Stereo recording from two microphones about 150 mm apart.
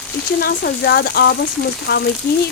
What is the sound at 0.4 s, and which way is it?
Speech, 90° left.